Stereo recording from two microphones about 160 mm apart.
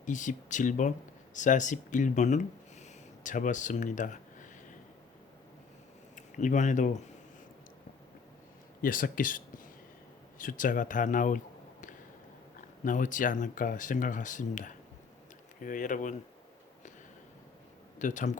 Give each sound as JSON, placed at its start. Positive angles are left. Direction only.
{"t": 0.0, "sound": "speech", "side_deg": 50}
{"t": 6.1, "sound": "speech", "side_deg": 50}
{"t": 8.8, "sound": "speech", "side_deg": 60}
{"t": 18.0, "sound": "speech", "side_deg": 50}